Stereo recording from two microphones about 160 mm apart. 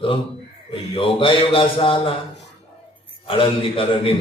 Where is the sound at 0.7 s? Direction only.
35° left (ahead or behind).